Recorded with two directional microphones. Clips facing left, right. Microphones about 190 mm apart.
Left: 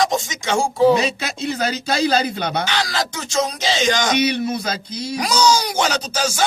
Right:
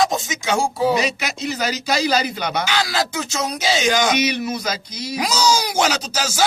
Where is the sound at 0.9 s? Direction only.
30° left (ahead or behind).